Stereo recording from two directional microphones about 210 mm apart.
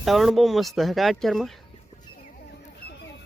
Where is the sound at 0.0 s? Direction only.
Centre (ahead or behind).